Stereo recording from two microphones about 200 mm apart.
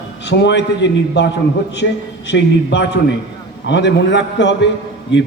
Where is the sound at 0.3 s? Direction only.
60° left (ahead or behind).